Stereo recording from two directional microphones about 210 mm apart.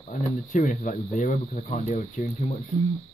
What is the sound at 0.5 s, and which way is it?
Speech, 35° left (ahead or behind).